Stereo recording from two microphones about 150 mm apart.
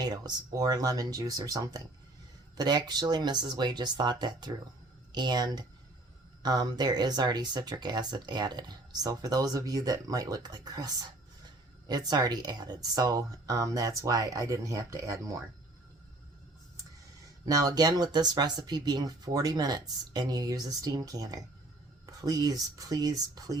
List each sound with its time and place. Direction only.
0.0 s speech: 30° right (ahead or behind)
17.4 s speech: 25° right (ahead or behind)